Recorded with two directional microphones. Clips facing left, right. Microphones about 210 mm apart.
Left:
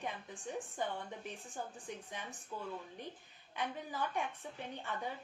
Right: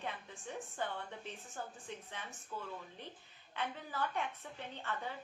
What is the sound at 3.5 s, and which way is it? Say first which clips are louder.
A woman's voice: left 1 dB; 15° left (ahead or behind).